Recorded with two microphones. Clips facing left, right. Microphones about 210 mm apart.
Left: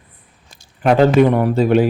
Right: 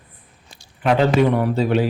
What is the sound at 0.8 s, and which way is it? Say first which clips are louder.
A man's voice: left 4 dB; 45° left (ahead or behind).